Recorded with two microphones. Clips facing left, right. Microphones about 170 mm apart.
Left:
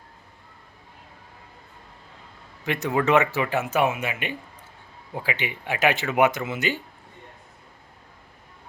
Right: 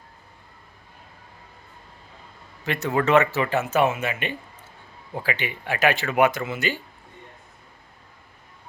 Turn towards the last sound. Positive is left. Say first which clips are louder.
# even
turn(degrees=20)  # may be behind; listen again after turning